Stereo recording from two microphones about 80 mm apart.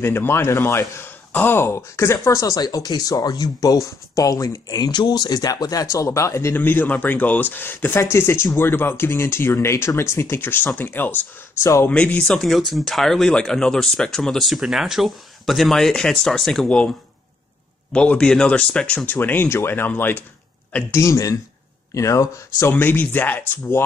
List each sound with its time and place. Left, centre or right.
0.0 s speech: left
6.5 s speech: left
11.6 s speech: left
11.9 s speech: centre
16.6 s speech: centre
17.9 s speech: centre
19.0 s speech: left
20.9 s speech: left
22.8 s speech: left